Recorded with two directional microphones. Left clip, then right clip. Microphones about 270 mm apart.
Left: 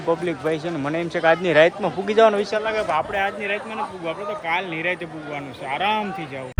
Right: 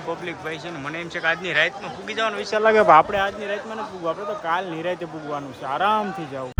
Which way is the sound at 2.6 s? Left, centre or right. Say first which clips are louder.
Right 8 dB; right.